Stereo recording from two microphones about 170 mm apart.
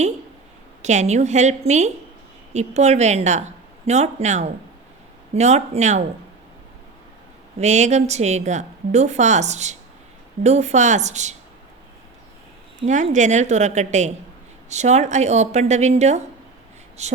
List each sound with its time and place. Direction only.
0.8 s a woman's voice: 45° right (ahead or behind)
7.6 s a woman's voice: 45° right (ahead or behind)
12.8 s a woman's voice: 45° right (ahead or behind)